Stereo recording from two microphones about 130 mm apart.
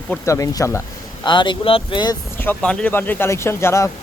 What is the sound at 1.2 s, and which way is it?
Speech, 35° left (ahead or behind).